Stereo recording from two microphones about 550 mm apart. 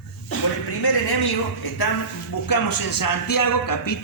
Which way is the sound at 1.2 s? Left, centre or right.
Left.